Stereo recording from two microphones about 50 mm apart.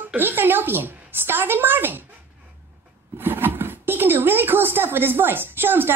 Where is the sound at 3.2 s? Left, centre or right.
Right.